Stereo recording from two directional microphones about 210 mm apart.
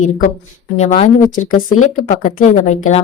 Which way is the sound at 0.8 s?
30° left (ahead or behind).